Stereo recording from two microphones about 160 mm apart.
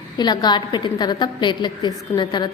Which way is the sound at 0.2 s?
25° left (ahead or behind).